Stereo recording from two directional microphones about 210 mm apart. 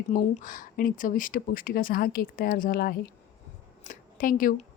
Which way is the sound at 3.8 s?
40° left (ahead or behind).